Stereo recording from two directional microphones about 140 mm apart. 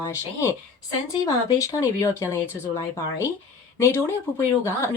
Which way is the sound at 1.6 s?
25° left (ahead or behind).